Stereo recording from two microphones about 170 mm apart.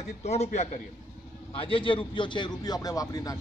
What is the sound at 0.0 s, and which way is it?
A man's voice, 40° left (ahead or behind).